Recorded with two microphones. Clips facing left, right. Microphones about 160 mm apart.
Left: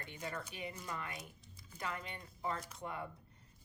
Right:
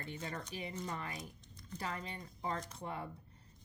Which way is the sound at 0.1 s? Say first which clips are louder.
Even; 30° right (ahead or behind).